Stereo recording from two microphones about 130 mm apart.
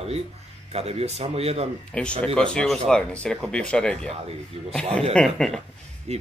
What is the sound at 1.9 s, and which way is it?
Speech, 10° left (ahead or behind).